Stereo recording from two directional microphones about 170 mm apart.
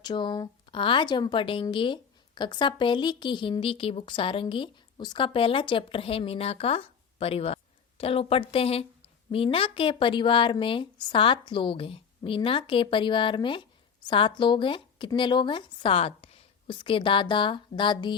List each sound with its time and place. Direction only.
0.0 s a woman's voice: 25° left (ahead or behind)